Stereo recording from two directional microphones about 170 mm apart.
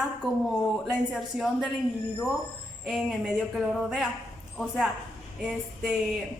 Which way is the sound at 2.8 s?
5° right (ahead or behind).